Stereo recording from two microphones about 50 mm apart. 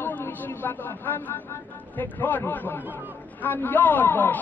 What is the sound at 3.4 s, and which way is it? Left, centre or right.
Speech, left.